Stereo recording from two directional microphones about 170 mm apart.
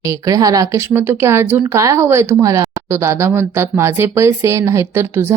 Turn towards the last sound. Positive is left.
turn(degrees=-15)  # may be behind; listen again after turning